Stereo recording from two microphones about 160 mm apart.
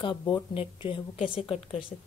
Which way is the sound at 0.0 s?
30° left (ahead or behind).